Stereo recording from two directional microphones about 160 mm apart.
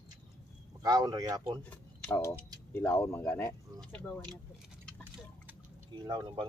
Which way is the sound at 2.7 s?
15° left (ahead or behind).